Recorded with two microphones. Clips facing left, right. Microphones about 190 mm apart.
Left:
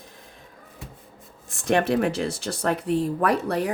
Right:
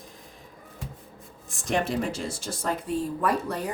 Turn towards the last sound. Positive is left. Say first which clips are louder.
# left 4 dB
turn(degrees=70)  # may be behind; listen again after turning